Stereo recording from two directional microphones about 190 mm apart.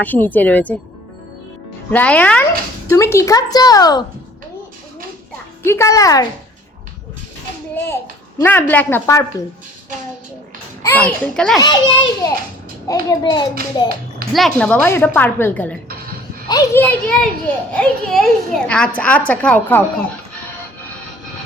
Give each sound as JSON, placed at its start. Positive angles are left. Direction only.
{"t": 0.0, "sound": "a woman's voice", "side_deg": 10}
{"t": 1.9, "sound": "a woman's voice", "side_deg": 10}
{"t": 5.6, "sound": "a woman's voice", "side_deg": 15}
{"t": 8.4, "sound": "a woman's voice", "side_deg": 10}
{"t": 10.8, "sound": "a child's voice", "side_deg": 5}
{"t": 11.6, "sound": "a woman's voice", "side_deg": 20}
{"t": 14.3, "sound": "a woman's voice", "side_deg": 0}
{"t": 16.5, "sound": "a woman's voice", "side_deg": 20}
{"t": 16.8, "sound": "a woman's voice", "side_deg": 5}